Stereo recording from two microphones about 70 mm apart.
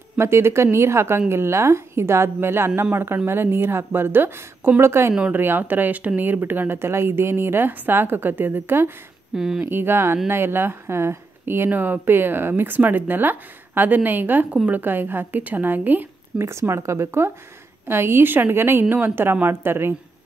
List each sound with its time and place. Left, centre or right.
0.2 s speech: right
9.3 s speech: centre
9.7 s speech: right
16.3 s speech: right